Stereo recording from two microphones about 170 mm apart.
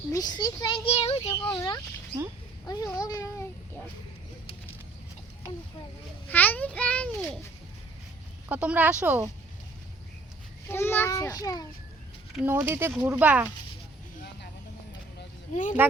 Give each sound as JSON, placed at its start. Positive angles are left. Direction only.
{"t": 0.1, "sound": "a child's voice", "side_deg": 25}
{"t": 1.5, "sound": "a child's voice", "side_deg": 20}
{"t": 6.2, "sound": "a child's voice", "side_deg": 10}
{"t": 8.4, "sound": "speech", "side_deg": -10}
{"t": 10.7, "sound": "a child's voice", "side_deg": 15}
{"t": 12.5, "sound": "speech", "side_deg": -15}
{"t": 15.5, "sound": "speech", "side_deg": 50}